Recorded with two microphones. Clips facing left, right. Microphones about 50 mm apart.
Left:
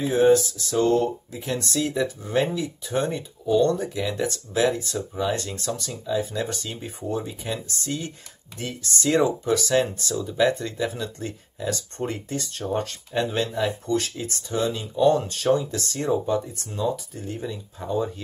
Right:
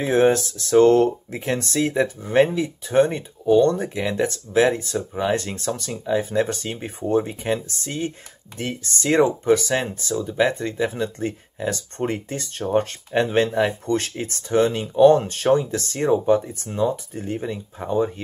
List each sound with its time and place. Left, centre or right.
0.0 s speech: right